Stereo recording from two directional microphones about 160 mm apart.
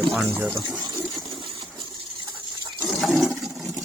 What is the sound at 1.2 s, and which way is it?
Coin, 30° right (ahead or behind).